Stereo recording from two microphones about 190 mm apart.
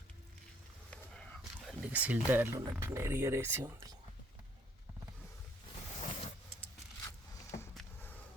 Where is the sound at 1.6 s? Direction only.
5° right (ahead or behind).